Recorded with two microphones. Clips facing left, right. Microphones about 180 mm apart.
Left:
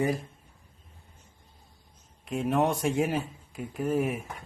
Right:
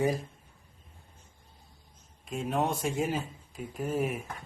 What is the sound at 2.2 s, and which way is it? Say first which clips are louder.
Speech: left 4 dB; 65° left (ahead or behind).